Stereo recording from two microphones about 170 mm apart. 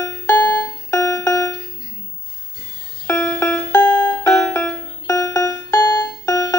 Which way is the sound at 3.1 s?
15° left (ahead or behind).